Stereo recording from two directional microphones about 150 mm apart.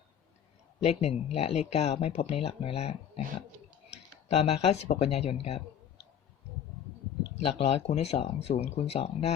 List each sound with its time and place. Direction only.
0.8 s speech: 45° left (ahead or behind)
7.3 s speech: 45° left (ahead or behind)